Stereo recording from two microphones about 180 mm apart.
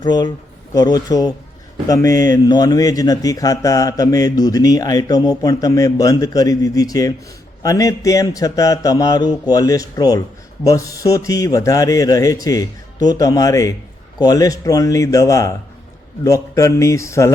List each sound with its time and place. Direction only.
0.0 s mantra: 25° left (ahead or behind)
16.2 s speech: 20° left (ahead or behind)